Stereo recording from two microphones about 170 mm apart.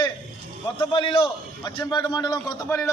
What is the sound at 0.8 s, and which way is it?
A man's voice, 30° left (ahead or behind).